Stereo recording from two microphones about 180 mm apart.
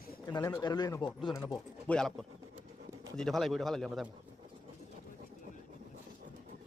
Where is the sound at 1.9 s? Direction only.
5° left (ahead or behind).